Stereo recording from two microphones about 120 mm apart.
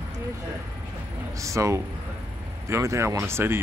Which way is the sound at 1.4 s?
25° right (ahead or behind).